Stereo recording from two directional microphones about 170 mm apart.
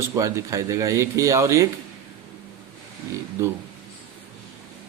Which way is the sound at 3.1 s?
15° right (ahead or behind).